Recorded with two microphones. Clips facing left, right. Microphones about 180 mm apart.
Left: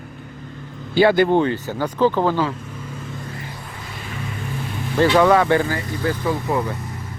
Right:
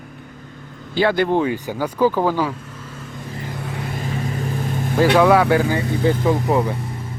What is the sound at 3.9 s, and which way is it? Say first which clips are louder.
Vehicle: right 5 dB; 40° right (ahead or behind).